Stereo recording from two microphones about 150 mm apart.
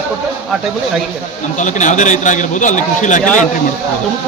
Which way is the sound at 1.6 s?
55° left (ahead or behind).